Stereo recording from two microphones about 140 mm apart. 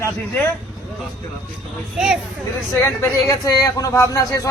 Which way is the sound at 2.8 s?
20° left (ahead or behind).